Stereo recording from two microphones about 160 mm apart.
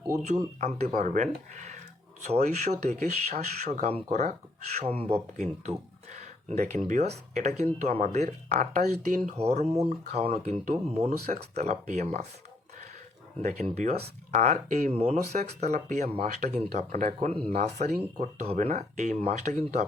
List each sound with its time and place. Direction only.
0.2 s speech: 45° right (ahead or behind)
8.8 s speech: 60° right (ahead or behind)
9.3 s speech: 40° right (ahead or behind)
13.4 s speech: 45° right (ahead or behind)